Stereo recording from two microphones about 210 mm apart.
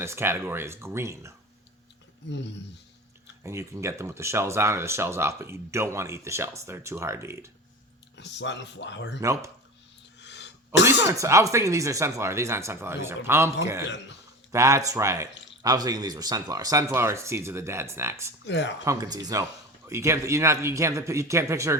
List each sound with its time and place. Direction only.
0.0 s speech: 10° right (ahead or behind)
2.3 s speech: 55° left (ahead or behind)
3.4 s speech: 15° right (ahead or behind)
8.1 s speech: 55° left (ahead or behind)
9.2 s speech: 15° right (ahead or behind)
10.2 s a sound: 55° left (ahead or behind)
10.8 s speech: 15° right (ahead or behind)
18.4 s speech: 60° left (ahead or behind)
18.9 s speech: 20° right (ahead or behind)